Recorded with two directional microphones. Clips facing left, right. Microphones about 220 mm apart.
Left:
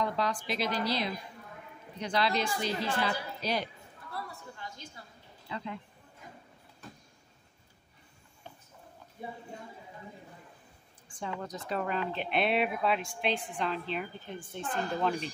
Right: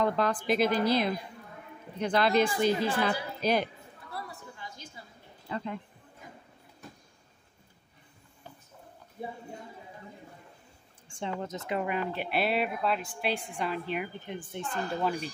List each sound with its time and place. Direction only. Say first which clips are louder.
0.0 s a woman's voice: right 4 dB; 55° right (ahead or behind)
5.5 s speech: right 4 dB; 50° right (ahead or behind)
11.1 s a woman's voice: right 3 dB; 25° right (ahead or behind)
11.8 s a woman's voice: left 1 dB; 10° right (ahead or behind)